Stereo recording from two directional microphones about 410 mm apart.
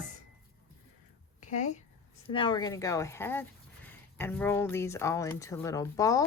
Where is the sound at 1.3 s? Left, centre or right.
Centre.